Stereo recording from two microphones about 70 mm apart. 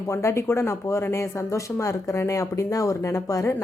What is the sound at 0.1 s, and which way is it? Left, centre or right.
A woman's voice, left.